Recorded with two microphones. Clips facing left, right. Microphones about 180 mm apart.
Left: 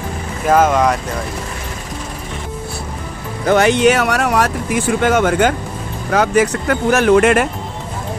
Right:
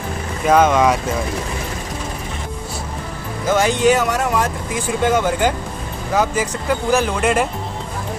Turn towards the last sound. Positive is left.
turn(degrees=70)  # may be behind; listen again after turning